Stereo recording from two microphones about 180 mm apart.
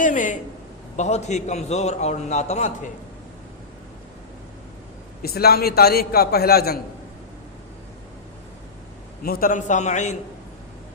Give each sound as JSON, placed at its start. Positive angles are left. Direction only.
{"t": 0.0, "sound": "a sound", "side_deg": 45}
{"t": 0.9, "sound": "a man's voice", "side_deg": 40}
{"t": 5.2, "sound": "a man's voice", "side_deg": 60}
{"t": 9.2, "sound": "a man's voice", "side_deg": 55}